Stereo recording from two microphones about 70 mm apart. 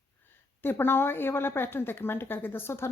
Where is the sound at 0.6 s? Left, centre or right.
Left.